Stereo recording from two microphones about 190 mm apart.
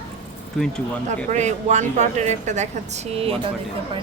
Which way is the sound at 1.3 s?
35° right (ahead or behind).